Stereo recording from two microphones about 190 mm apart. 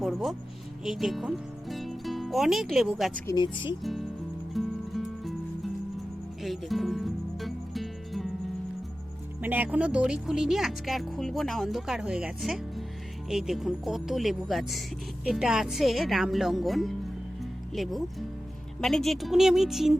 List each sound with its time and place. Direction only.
0.0 s speech: centre (ahead or behind)
3.2 s speech: 25° left (ahead or behind)
4.5 s music: centre (ahead or behind)
6.4 s music: centre (ahead or behind)
9.4 s speech: 10° right (ahead or behind)
17.4 s music: centre (ahead or behind)
18.8 s speech: centre (ahead or behind)